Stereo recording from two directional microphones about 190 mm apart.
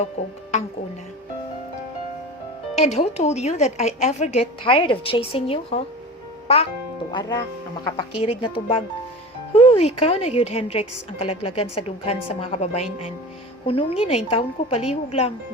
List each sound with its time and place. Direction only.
0.2 s a woman's voice: 35° left (ahead or behind)
2.8 s a woman's voice: 35° left (ahead or behind)
7.1 s a woman's voice: 25° left (ahead or behind)